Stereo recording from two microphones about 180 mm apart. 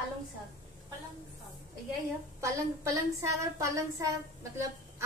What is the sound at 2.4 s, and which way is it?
A woman's voice, 15° right (ahead or behind).